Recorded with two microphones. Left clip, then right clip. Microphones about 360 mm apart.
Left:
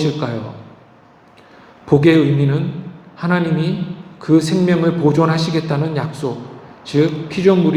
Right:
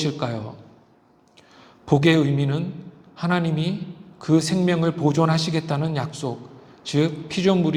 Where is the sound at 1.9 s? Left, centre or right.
Right.